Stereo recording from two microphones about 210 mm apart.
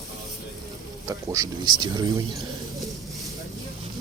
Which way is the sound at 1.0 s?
15° right (ahead or behind).